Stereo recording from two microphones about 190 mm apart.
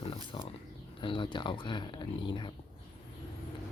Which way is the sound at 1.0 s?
25° left (ahead or behind).